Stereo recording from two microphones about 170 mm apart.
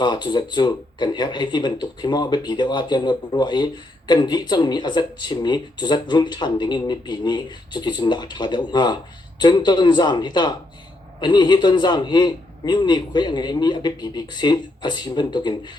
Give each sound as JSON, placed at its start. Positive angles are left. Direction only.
{"t": 0.0, "sound": "speech", "side_deg": 25}